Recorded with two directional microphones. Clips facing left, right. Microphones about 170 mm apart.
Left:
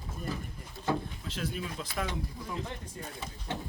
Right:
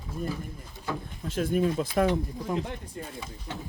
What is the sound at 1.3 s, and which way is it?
Speech, 50° right (ahead or behind).